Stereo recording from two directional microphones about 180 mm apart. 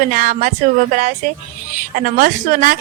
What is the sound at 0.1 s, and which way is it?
Speech, 45° right (ahead or behind).